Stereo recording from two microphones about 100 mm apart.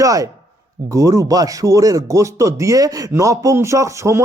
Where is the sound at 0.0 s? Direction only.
35° right (ahead or behind).